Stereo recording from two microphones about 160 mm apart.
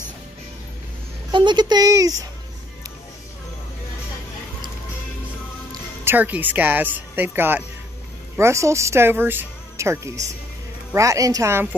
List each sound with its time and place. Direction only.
1.3 s a woman's voice: 30° right (ahead or behind)
5.7 s a woman's voice: 10° right (ahead or behind)